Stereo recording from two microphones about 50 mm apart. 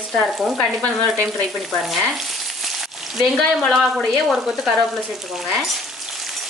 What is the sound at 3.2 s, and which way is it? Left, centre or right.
A woman's voice, centre.